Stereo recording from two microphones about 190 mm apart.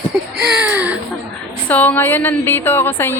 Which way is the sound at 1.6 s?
10° left (ahead or behind).